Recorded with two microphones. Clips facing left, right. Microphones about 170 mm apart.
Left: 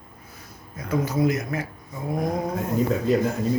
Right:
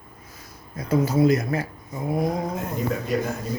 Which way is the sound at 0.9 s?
35° right (ahead or behind).